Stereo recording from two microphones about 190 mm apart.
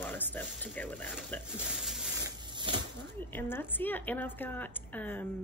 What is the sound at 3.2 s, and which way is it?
A woman's voice, 10° left (ahead or behind).